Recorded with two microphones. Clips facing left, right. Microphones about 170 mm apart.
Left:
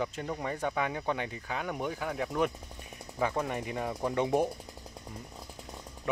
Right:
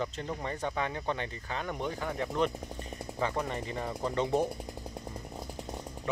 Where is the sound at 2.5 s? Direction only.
30° right (ahead or behind).